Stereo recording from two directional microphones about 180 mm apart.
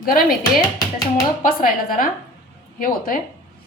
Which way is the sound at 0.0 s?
55° left (ahead or behind).